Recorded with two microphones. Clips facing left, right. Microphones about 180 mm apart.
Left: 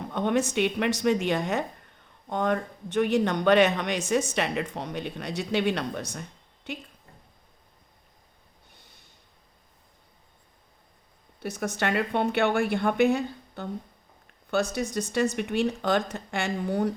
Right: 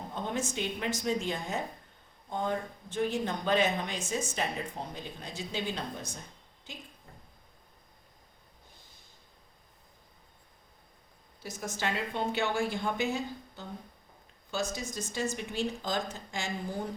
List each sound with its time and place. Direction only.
0.1 s a woman's voice: 70° left (ahead or behind)
11.3 s speech: 65° left (ahead or behind)